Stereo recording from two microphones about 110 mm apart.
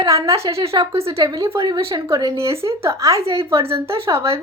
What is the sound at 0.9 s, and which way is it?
Speech, 60° right (ahead or behind).